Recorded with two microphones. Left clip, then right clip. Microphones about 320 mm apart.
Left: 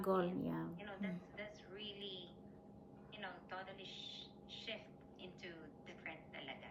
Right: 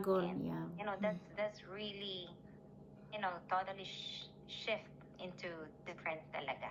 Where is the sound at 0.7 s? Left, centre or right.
Centre.